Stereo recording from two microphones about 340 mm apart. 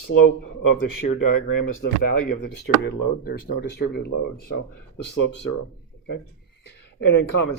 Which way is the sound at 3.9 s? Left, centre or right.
Left.